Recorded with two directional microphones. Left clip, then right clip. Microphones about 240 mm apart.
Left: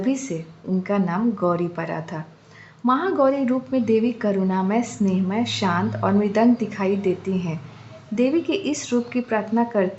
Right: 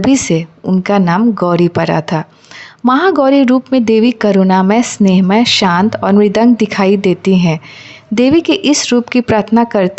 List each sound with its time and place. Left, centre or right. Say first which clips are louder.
0.0 s speech: right 13 dB; right